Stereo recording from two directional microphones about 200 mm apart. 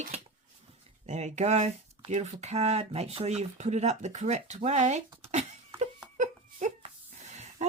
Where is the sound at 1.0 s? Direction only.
35° right (ahead or behind).